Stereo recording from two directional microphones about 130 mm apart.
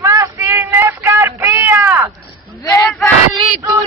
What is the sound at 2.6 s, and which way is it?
Speech, 25° left (ahead or behind).